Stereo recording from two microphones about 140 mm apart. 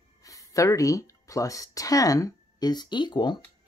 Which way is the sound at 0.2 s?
25° left (ahead or behind).